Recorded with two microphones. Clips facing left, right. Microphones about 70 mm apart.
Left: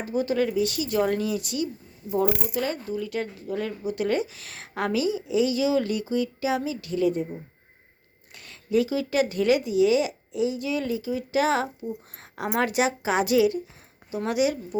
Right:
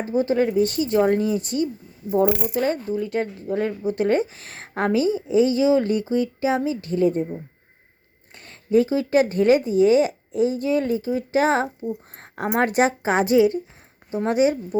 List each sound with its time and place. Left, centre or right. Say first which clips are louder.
0.0 s speech: right 4 dB; right
8.4 s speech: right 5 dB; right